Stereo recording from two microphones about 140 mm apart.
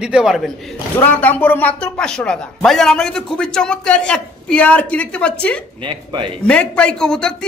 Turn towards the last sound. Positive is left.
turn(degrees=5)  # may be behind; listen again after turning